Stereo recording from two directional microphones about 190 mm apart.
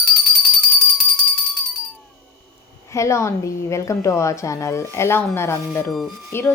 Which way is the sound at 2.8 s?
15° left (ahead or behind).